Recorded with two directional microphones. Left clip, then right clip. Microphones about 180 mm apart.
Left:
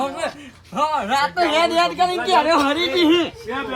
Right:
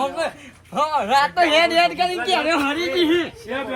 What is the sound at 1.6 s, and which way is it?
Speech, 30° left (ahead or behind).